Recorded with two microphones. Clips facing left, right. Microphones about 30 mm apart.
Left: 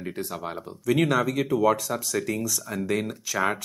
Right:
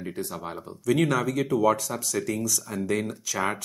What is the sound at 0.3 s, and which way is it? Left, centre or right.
Speech, centre.